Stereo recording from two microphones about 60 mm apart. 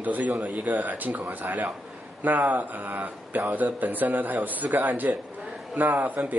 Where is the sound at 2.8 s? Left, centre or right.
Right.